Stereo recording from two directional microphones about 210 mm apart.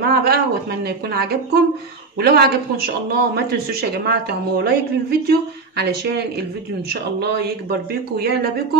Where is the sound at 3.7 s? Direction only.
45° right (ahead or behind).